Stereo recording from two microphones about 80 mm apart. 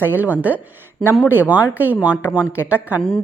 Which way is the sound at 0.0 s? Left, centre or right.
Right.